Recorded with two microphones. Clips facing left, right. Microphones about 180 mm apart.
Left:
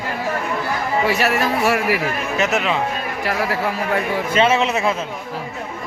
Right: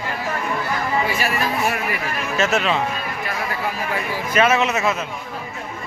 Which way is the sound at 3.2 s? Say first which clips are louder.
Left 7 dB; 75° left (ahead or behind).